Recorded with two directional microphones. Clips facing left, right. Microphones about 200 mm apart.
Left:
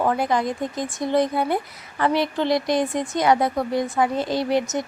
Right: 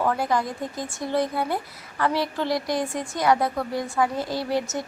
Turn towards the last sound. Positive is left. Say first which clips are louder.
# left 4 dB
turn(degrees=20)  # may be behind; listen again after turning